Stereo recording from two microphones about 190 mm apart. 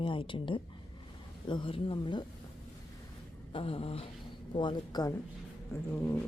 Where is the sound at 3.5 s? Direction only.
30° left (ahead or behind); by 6.2 s 10° left (ahead or behind).